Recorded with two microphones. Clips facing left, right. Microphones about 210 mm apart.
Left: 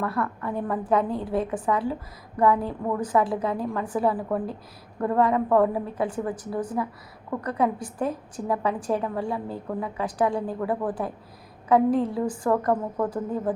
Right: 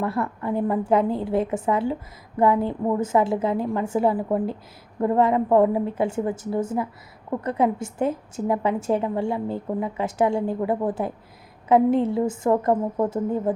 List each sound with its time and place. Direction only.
0.0 s a woman's voice: 25° right (ahead or behind)